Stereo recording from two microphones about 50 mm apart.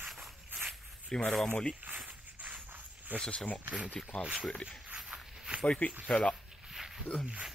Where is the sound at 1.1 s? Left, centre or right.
Centre.